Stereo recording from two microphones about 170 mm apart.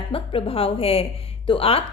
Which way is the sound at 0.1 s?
35° left (ahead or behind).